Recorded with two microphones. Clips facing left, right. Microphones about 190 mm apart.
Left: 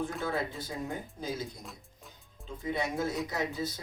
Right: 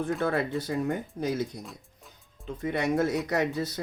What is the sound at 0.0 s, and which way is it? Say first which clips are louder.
Speech: right 6 dB; 60° right (ahead or behind).